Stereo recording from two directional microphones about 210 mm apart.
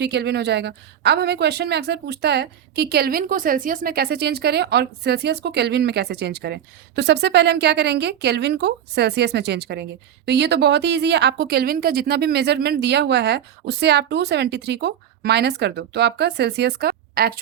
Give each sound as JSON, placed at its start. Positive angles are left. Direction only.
{"t": 0.0, "sound": "a woman's voice", "side_deg": -50}